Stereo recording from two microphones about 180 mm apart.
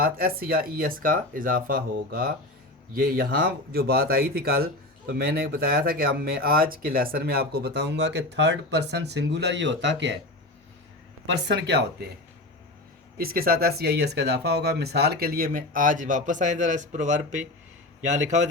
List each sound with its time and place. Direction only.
0.0 s speech: 55° right (ahead or behind); by 10.2 s 75° right (ahead or behind)
11.4 s speech: 70° right (ahead or behind)
13.1 s speech: 55° right (ahead or behind)